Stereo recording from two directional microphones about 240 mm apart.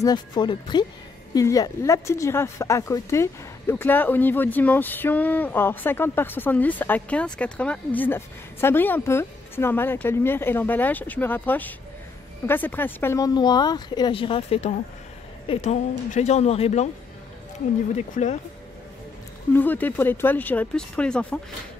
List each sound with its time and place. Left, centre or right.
0.0 s speech: centre
17.9 s speech: left
19.5 s speech: centre